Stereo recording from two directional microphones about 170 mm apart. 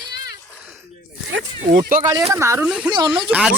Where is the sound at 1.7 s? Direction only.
55° right (ahead or behind).